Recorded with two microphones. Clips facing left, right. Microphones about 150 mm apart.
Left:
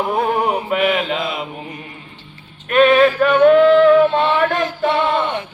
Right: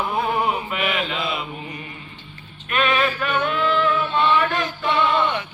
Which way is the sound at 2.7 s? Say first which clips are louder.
Left 10 dB; 45° left (ahead or behind).